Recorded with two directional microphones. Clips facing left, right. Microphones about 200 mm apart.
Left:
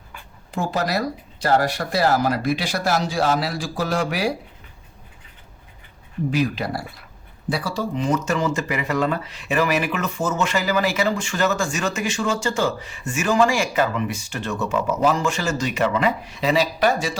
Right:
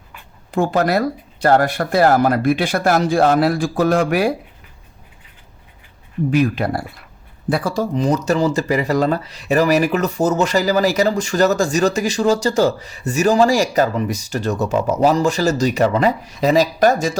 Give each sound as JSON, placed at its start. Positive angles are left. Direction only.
{"t": 0.5, "sound": "speech", "side_deg": -55}
{"t": 6.3, "sound": "speech", "side_deg": -55}